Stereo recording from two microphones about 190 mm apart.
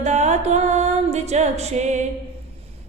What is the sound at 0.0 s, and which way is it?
Music, 35° right (ahead or behind).